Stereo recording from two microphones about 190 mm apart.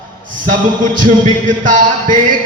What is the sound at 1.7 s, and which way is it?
Music, 40° right (ahead or behind).